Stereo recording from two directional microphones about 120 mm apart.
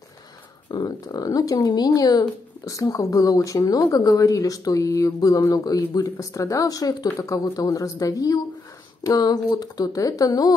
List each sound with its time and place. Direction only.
0.8 s speech: 30° left (ahead or behind)